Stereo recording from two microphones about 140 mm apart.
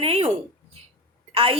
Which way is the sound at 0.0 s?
45° right (ahead or behind).